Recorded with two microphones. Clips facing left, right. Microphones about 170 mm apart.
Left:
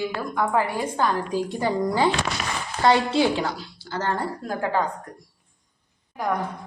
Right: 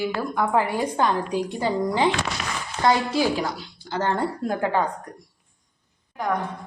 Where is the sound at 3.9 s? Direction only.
20° right (ahead or behind).